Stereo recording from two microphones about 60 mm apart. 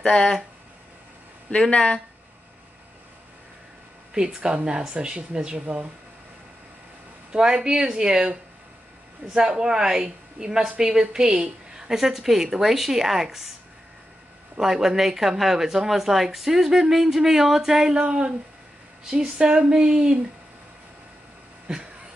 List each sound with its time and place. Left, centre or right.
0.1 s speech: centre
1.5 s speech: left
4.1 s a woman's voice: centre
7.3 s a woman's voice: centre
9.3 s a woman's voice: centre
14.6 s a woman's voice: centre
21.7 s a woman's voice: centre